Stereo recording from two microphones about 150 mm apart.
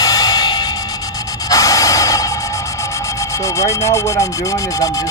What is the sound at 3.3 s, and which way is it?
Speech, 20° left (ahead or behind).